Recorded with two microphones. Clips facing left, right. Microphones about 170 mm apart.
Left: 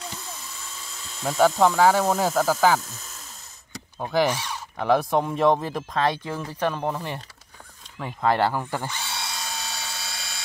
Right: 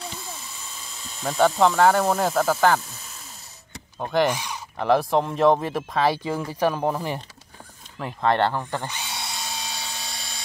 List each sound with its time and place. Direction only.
1.2 s speech: centre (ahead or behind)
4.0 s speech: centre (ahead or behind)
4.3 s speech: 15° right (ahead or behind)
4.7 s speech: centre (ahead or behind)
8.0 s speech: 5° left (ahead or behind)
8.8 s drill: 20° right (ahead or behind)